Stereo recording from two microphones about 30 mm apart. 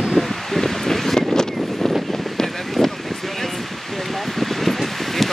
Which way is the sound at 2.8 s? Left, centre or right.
Centre.